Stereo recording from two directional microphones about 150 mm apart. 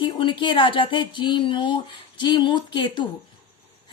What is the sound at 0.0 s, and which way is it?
Speech, 35° left (ahead or behind).